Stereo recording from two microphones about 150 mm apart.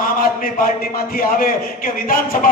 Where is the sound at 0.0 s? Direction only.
70° left (ahead or behind).